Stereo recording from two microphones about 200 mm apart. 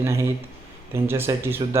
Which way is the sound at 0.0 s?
15° right (ahead or behind).